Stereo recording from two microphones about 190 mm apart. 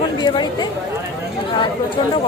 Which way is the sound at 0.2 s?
25° left (ahead or behind).